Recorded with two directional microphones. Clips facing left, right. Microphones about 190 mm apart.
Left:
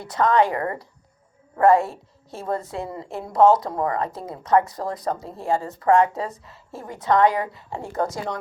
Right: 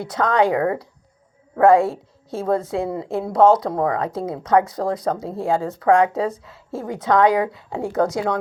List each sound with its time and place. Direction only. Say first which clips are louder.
0.0 s a woman's voice: right 1 dB; 90° right
4.3 s a woman's voice: right 2 dB; 90° right